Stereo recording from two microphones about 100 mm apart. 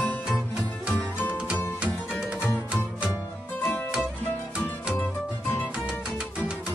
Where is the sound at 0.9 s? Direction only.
20° left (ahead or behind).